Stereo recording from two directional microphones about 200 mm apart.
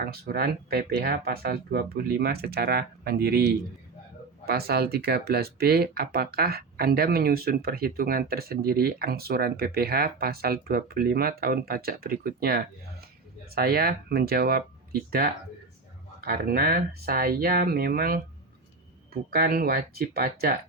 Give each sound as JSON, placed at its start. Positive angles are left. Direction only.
{"t": 0.0, "sound": "speech", "side_deg": -50}
{"t": 4.4, "sound": "speech", "side_deg": -50}